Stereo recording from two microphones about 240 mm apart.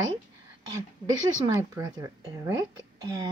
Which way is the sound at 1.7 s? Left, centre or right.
Centre.